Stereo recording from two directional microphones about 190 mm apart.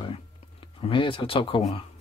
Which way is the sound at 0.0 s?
25° left (ahead or behind).